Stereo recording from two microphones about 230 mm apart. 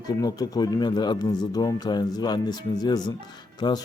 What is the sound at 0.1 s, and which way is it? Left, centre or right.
A man's voice, centre.